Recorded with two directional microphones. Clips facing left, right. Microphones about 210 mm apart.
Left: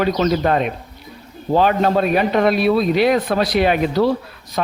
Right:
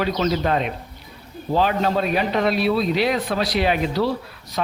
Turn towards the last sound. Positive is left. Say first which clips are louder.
# left 3 dB
turn(degrees=50)  # may be behind; listen again after turning